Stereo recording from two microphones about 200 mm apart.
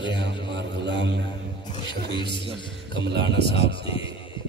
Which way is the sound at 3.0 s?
60° right (ahead or behind).